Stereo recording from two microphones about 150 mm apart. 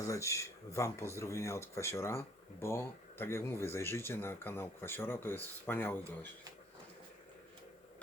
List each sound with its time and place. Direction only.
0.0 s speech: 20° left (ahead or behind)